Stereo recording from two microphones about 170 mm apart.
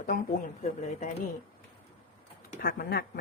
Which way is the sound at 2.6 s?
60° left (ahead or behind).